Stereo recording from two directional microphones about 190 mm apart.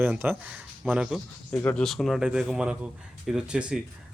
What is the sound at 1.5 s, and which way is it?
Speech, 5° left (ahead or behind).